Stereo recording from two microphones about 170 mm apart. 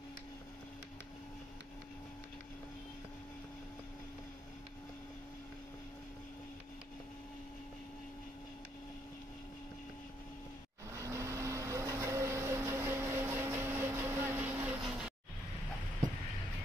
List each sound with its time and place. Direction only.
10.9 s vehicle: 15° right (ahead or behind)